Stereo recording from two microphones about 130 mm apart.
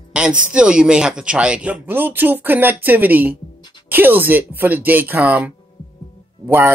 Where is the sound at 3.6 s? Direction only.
35° left (ahead or behind).